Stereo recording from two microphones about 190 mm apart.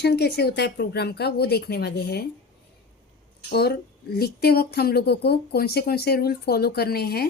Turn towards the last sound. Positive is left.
turn(degrees=55)  # may be behind; listen again after turning